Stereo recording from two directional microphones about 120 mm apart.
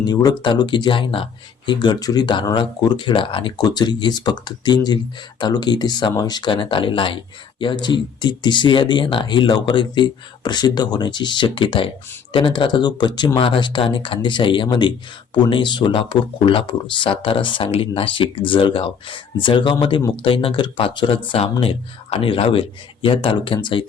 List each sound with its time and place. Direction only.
0.0 s speech: 35° left (ahead or behind)